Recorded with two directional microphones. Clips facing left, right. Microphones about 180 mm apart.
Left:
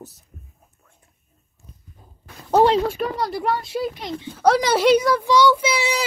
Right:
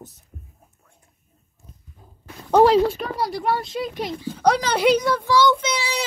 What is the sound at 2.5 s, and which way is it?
A child's voice, centre (ahead or behind).